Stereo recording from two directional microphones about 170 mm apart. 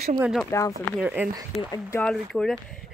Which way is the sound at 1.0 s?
5° right (ahead or behind).